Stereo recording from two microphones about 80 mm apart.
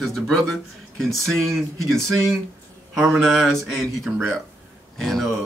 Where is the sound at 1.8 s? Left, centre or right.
Right.